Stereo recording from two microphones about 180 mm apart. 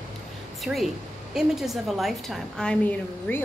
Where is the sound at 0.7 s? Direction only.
10° right (ahead or behind); by 3.4 s 10° left (ahead or behind).